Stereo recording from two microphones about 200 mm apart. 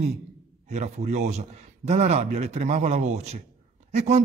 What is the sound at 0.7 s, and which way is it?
Speech, 35° right (ahead or behind).